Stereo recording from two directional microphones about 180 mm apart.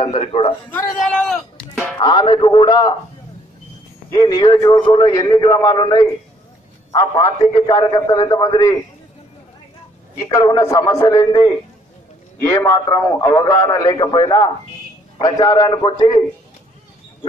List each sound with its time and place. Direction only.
0.0 s a man's voice: 30° left (ahead or behind)
0.7 s a man's voice: 10° left (ahead or behind)
0.9 s a sound: 5° left (ahead or behind)
2.0 s a man's voice: 25° left (ahead or behind)
4.1 s a man's voice: 25° left (ahead or behind)
10.1 s a man's voice: 20° left (ahead or behind)